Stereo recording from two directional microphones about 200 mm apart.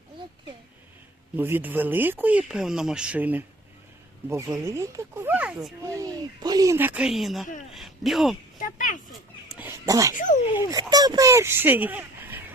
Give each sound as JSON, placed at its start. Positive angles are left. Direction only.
{"t": 1.4, "sound": "speech", "side_deg": -10}
{"t": 5.8, "sound": "speech", "side_deg": -15}
{"t": 8.6, "sound": "a sound", "side_deg": 40}
{"t": 9.6, "sound": "cat", "side_deg": -10}
{"t": 10.2, "sound": "speech", "side_deg": 40}
{"t": 10.6, "sound": "speech", "side_deg": -20}